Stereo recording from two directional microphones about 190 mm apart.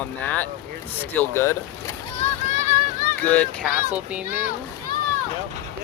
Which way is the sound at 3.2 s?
5° left (ahead or behind).